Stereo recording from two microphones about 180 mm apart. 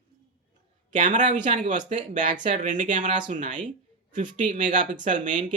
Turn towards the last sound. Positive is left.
turn(degrees=-45)  # may be behind; listen again after turning